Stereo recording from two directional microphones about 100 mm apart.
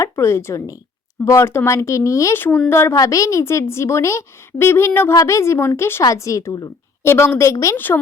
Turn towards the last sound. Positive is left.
turn(degrees=20)  # may be behind; listen again after turning